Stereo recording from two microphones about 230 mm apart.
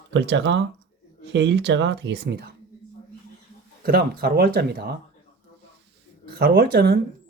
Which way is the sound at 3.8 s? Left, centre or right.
Right.